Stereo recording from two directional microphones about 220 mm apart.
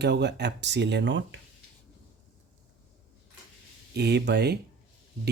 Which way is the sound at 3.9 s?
50° right (ahead or behind).